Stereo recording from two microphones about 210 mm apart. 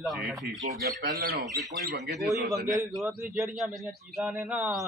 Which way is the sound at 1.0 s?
45° right (ahead or behind).